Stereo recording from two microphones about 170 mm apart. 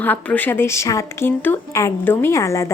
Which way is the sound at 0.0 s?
10° left (ahead or behind).